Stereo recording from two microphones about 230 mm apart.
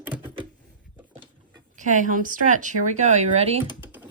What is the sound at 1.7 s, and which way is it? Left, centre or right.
Speech, right.